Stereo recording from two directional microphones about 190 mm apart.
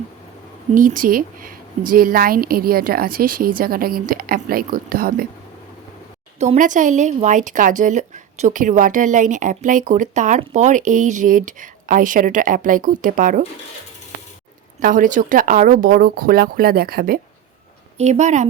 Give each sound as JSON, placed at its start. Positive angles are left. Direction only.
{"t": 0.7, "sound": "speech", "side_deg": -45}
{"t": 6.4, "sound": "speech", "side_deg": -40}
{"t": 14.8, "sound": "speech", "side_deg": -45}
{"t": 17.9, "sound": "speech", "side_deg": -35}